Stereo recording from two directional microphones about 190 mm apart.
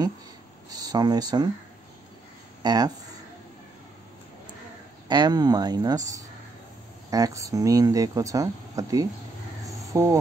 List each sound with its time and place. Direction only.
0.7 s speech: 20° right (ahead or behind)
2.6 s speech: 20° right (ahead or behind)
5.0 s speech: 25° right (ahead or behind)